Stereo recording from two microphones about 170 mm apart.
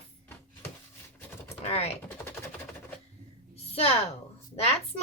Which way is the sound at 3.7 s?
35° left (ahead or behind).